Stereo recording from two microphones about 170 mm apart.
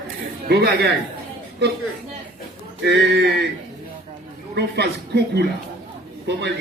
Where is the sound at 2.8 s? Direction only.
90° right.